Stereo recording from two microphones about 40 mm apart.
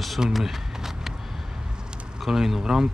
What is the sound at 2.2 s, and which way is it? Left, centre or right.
Speech, centre.